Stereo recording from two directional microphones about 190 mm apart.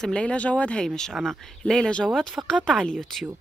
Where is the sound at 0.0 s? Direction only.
5° left (ahead or behind).